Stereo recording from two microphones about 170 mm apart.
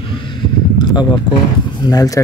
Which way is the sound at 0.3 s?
30° left (ahead or behind).